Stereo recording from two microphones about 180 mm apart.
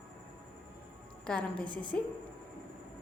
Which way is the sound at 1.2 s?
5° left (ahead or behind).